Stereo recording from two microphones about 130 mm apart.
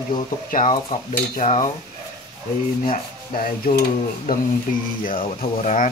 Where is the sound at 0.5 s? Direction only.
90° left.